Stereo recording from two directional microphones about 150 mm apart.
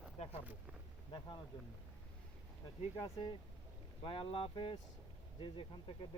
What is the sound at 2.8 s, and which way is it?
Speech, 35° left (ahead or behind).